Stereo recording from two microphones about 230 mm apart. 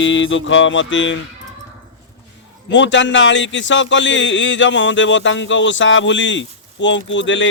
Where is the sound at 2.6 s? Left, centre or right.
Left.